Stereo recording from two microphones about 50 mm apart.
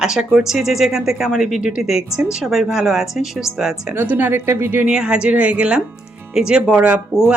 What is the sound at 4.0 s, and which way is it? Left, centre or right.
Speech, right.